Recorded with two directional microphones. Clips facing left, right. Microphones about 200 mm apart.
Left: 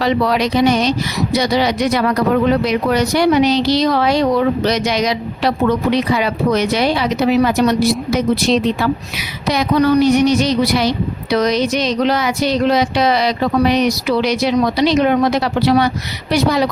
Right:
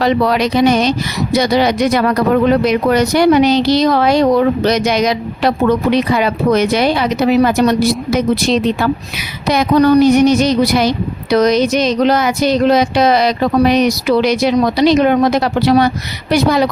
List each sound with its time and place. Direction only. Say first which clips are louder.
0.5 s speech: right 2 dB; 50° right (ahead or behind)
9.5 s speech: right 3 dB; 50° right (ahead or behind)